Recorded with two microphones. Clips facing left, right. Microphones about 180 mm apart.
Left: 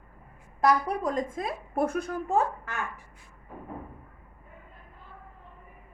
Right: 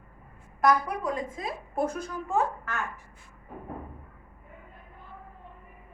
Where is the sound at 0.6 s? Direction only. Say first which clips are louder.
Even; 40° left (ahead or behind); by 2.1 s 55° left (ahead or behind).